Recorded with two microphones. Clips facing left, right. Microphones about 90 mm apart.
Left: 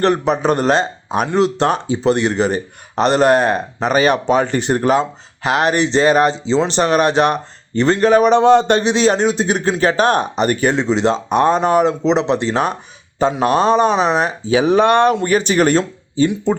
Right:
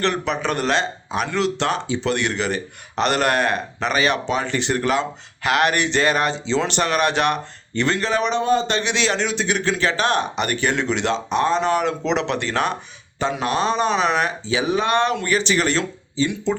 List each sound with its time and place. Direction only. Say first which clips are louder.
0.0 s speech: left 7 dB; 40° left (ahead or behind)
8.4 s speech: left 8 dB; 65° left (ahead or behind)
8.8 s speech: left 8 dB; 35° left (ahead or behind)
11.3 s speech: left 4 dB; 50° left (ahead or behind); by 14.5 s 35° left (ahead or behind)
14.5 s speech: left 8 dB; 50° left (ahead or behind)